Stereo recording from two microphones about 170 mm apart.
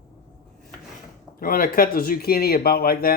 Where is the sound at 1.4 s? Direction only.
55° left (ahead or behind).